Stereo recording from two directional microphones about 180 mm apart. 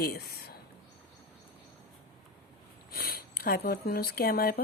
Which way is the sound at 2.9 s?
60° left (ahead or behind).